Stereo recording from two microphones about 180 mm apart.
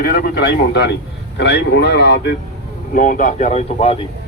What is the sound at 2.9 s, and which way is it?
Speech, 45° left (ahead or behind).